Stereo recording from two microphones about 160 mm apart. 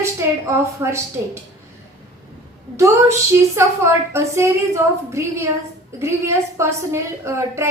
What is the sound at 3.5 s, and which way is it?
A woman's voice, 15° right (ahead or behind).